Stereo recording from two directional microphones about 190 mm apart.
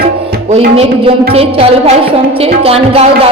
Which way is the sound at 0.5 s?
35° right (ahead or behind).